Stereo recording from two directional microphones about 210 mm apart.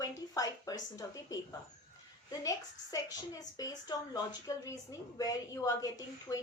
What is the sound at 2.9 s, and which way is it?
A woman's voice, 15° left (ahead or behind).